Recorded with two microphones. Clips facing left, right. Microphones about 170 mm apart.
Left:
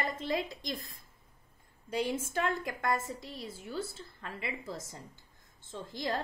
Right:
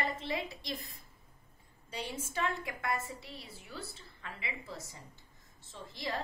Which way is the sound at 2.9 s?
90° left.